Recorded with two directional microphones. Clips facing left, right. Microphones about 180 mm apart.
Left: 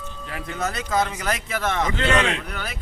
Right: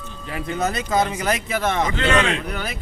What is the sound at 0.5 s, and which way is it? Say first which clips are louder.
Speech: right 3 dB; 20° right (ahead or behind).